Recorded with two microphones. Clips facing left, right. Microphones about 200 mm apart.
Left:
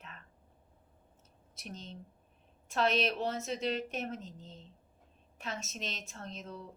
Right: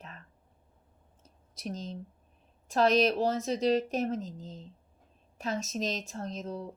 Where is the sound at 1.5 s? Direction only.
35° right (ahead or behind).